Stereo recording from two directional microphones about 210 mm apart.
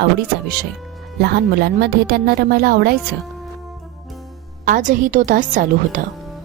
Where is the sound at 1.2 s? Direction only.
50° right (ahead or behind).